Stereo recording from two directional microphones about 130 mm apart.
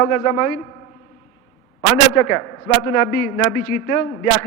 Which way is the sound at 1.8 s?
20° left (ahead or behind).